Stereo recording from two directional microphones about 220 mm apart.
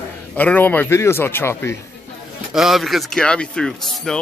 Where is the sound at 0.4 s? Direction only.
5° left (ahead or behind).